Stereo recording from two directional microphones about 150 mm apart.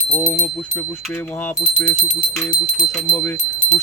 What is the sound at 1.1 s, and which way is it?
Speech, 10° left (ahead or behind).